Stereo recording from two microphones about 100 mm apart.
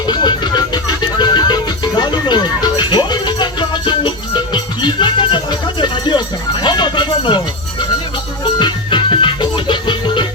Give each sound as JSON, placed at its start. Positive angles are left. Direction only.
{"t": 0.1, "sound": "music", "side_deg": 45}